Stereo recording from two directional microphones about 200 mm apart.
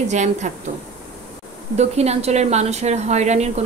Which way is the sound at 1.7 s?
30° right (ahead or behind).